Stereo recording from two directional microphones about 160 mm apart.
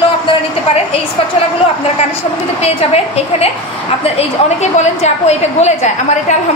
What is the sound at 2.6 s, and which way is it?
A woman's voice, 40° left (ahead or behind).